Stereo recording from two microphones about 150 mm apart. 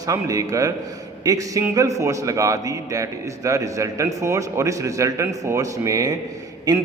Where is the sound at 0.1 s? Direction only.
20° right (ahead or behind).